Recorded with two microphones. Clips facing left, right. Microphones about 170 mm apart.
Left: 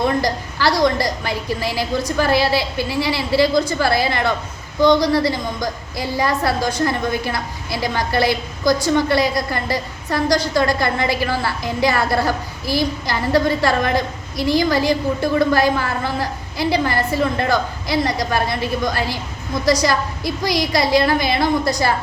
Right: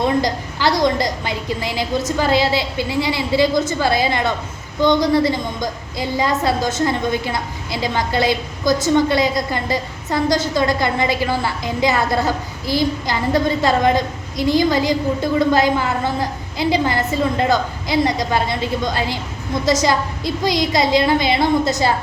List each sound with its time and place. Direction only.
0.0 s a woman's voice: 20° right (ahead or behind)